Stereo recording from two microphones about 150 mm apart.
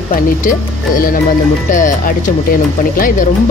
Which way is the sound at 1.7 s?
60° left (ahead or behind).